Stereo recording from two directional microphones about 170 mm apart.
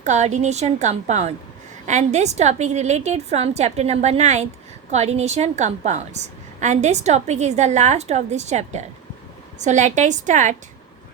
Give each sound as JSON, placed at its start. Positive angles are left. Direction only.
{"t": 0.0, "sound": "a woman's voice", "side_deg": -40}